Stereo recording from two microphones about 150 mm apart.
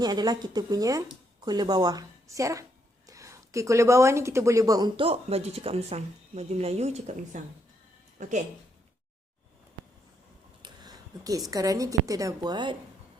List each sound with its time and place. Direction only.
0.0 s a woman's voice: 25° right (ahead or behind); by 8.3 s 55° right (ahead or behind)
10.6 s a sound: 25° right (ahead or behind)
11.5 s a woman's voice: 25° right (ahead or behind)